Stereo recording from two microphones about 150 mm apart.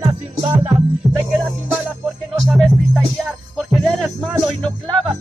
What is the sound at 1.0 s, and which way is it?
Music, centre (ahead or behind).